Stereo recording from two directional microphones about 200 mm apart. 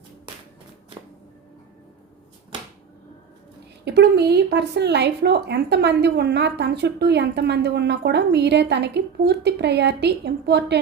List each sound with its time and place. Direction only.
3.8 s speech: 55° right (ahead or behind)